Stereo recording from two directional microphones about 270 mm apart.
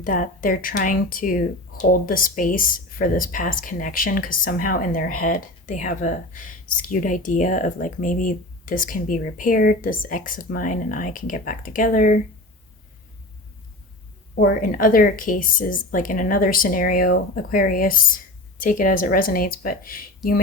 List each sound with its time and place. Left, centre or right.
0.0 s speech: left
14.3 s speech: left